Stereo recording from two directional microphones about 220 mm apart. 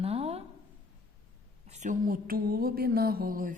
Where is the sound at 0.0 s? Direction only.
25° right (ahead or behind).